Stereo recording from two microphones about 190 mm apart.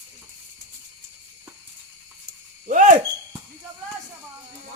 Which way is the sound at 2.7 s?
40° right (ahead or behind).